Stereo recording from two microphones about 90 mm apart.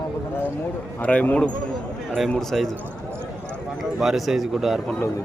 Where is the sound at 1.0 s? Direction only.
15° left (ahead or behind).